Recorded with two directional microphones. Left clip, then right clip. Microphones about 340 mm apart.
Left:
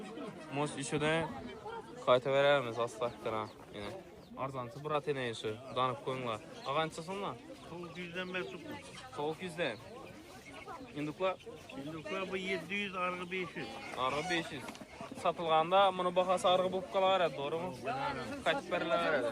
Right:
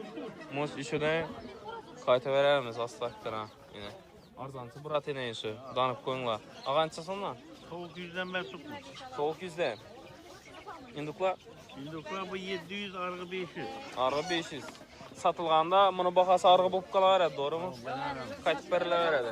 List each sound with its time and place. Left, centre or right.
0.5 s a man's voice: centre
7.9 s speech: right
9.2 s a man's voice: centre
10.9 s a man's voice: centre